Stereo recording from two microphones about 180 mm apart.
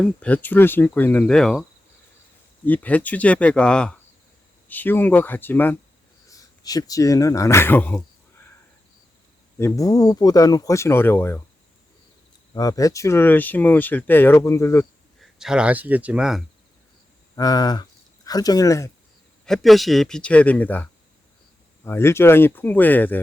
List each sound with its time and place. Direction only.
0.0 s speech: 5° left (ahead or behind)
2.6 s speech: 10° left (ahead or behind)
9.6 s speech: 15° left (ahead or behind)
12.5 s speech: 20° left (ahead or behind)
15.2 s speech: 5° right (ahead or behind)
17.3 s speech: 20° left (ahead or behind)
19.5 s speech: centre (ahead or behind)
21.8 s speech: 15° left (ahead or behind)